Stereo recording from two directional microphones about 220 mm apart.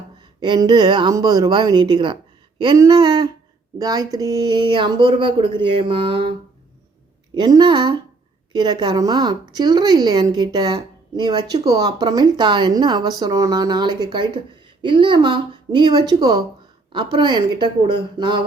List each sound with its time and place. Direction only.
0.3 s a woman's voice: 20° right (ahead or behind)
7.3 s a woman's voice: 20° right (ahead or behind)